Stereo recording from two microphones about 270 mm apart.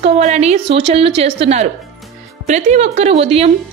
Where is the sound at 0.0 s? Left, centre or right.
Right.